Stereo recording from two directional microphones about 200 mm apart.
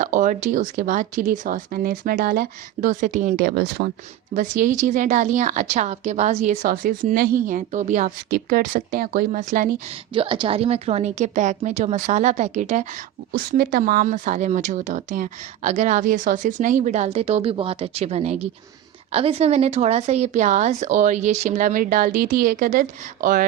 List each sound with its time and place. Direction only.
0.0 s a woman's voice: 40° right (ahead or behind)
10.2 s a woman's voice: 25° right (ahead or behind); by 23.5 s 45° right (ahead or behind)